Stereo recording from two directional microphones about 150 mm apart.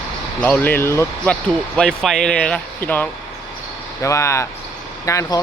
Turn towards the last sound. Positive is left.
turn(degrees=20)  # may be behind; listen again after turning